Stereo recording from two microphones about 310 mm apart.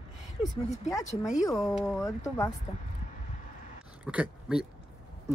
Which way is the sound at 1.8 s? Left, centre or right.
Centre.